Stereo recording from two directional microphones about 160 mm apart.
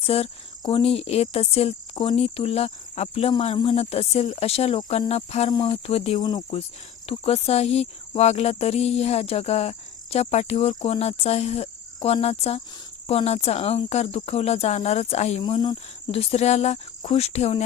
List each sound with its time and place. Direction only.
0.0 s speech: 35° left (ahead or behind)
6.1 s speech: 25° left (ahead or behind)
7.1 s speech: 40° left (ahead or behind)
15.4 s speech: 30° left (ahead or behind)
16.1 s speech: 40° left (ahead or behind)